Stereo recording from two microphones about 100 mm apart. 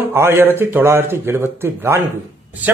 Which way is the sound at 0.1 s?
25° right (ahead or behind).